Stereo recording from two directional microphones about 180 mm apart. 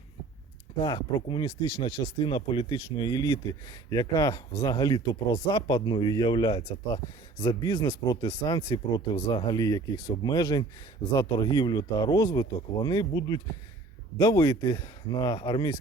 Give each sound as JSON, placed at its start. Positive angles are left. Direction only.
{"t": 0.8, "sound": "speech", "side_deg": 25}